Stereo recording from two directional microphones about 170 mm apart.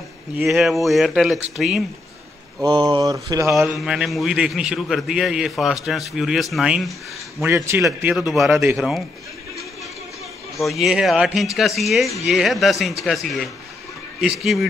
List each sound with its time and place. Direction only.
0.4 s a man's voice: centre (ahead or behind)
2.6 s speech: 25° right (ahead or behind)
3.7 s a man's voice: 5° right (ahead or behind)
7.4 s a man's voice: 15° right (ahead or behind)
10.6 s a man's voice: centre (ahead or behind)